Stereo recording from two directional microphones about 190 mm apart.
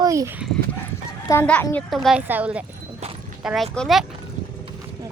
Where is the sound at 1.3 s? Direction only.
10° left (ahead or behind).